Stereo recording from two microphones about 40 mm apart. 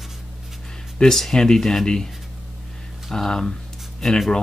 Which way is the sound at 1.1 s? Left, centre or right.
Centre.